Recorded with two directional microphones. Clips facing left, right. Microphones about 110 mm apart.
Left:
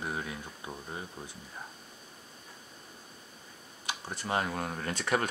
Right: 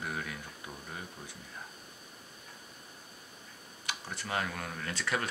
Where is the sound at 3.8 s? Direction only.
25° left (ahead or behind).